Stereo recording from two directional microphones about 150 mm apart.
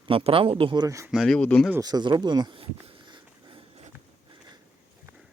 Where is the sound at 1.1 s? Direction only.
Centre (ahead or behind).